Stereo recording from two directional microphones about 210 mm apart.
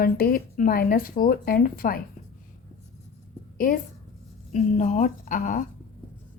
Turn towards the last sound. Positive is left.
turn(degrees=40)  # may be behind; listen again after turning